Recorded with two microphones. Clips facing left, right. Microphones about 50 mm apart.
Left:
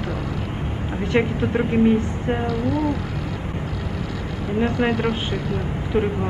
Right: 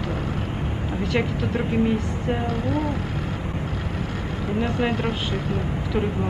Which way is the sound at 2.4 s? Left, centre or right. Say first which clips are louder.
Left 2 dB; right.